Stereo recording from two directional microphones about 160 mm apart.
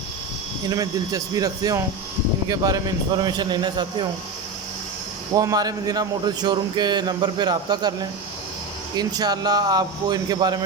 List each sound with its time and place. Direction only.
0.7 s speech: 20° right (ahead or behind)
5.3 s speech: 20° right (ahead or behind)
9.0 s speech: 25° right (ahead or behind)